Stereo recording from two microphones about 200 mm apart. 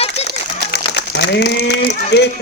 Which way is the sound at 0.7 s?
55° left (ahead or behind).